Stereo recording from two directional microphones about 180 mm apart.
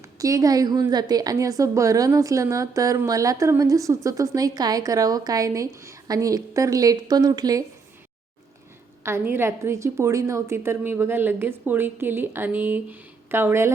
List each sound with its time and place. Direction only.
0.0 s a woman's voice: 20° right (ahead or behind)
9.0 s a woman's voice: 15° right (ahead or behind)